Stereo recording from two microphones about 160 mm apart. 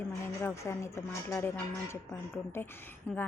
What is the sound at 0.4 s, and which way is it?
A woman's voice, 15° left (ahead or behind).